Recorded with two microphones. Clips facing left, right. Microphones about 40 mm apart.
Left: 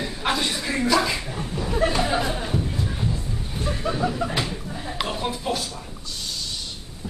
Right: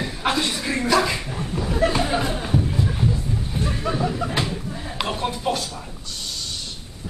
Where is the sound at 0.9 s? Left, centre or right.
Right.